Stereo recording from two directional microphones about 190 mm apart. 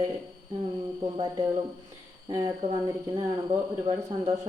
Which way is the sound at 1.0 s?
20° right (ahead or behind).